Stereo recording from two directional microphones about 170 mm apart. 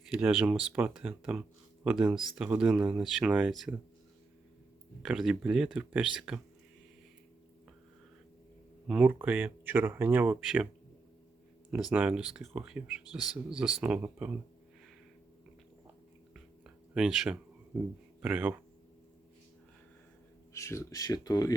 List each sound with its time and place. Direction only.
0.1 s speech: 5° right (ahead or behind)
5.0 s speech: 5° right (ahead or behind)
8.9 s speech: 10° right (ahead or behind)
11.9 s speech: 10° right (ahead or behind)
16.3 s a sound: 5° right (ahead or behind)
17.7 s speech: 5° right (ahead or behind)
20.5 s speech: 15° left (ahead or behind)